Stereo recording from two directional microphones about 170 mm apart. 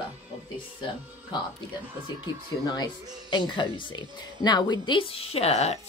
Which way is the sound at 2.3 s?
25° left (ahead or behind).